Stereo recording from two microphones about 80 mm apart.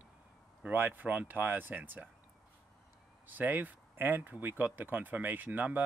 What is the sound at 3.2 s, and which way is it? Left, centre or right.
Speech, right.